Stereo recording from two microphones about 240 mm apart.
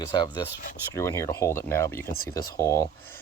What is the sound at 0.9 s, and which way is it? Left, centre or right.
Speech, centre.